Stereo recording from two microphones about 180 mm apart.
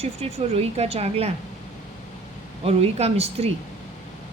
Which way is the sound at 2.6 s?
35° right (ahead or behind).